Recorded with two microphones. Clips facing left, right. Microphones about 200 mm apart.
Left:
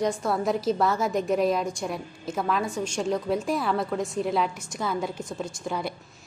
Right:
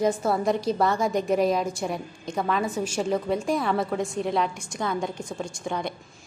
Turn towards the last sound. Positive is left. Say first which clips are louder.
# right 1 dB
turn(degrees=5)  # may be behind; listen again after turning